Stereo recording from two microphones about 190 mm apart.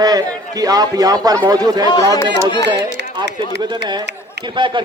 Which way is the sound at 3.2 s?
65° right (ahead or behind).